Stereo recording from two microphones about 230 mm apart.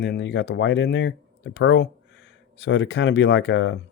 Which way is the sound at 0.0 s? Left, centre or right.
Left.